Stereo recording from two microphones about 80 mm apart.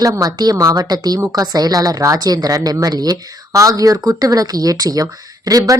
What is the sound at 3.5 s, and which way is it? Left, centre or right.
Speech, right.